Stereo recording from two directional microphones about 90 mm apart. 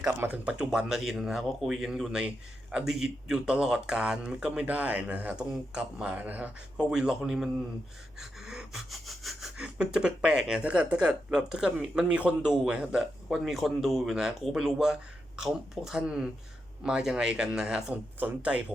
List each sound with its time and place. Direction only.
0.2 s speech: 20° right (ahead or behind)
0.6 s speech: 5° right (ahead or behind)
17.9 s speech: 20° right (ahead or behind)